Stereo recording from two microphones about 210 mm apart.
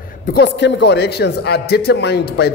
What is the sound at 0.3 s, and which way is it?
Speech, 55° left (ahead or behind).